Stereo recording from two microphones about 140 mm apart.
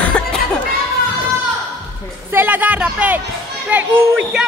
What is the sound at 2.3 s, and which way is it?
Music, 15° right (ahead or behind).